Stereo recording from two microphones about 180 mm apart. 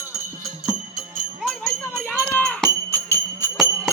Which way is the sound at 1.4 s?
Centre (ahead or behind).